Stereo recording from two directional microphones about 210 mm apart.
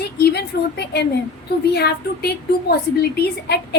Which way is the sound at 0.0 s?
50° left (ahead or behind).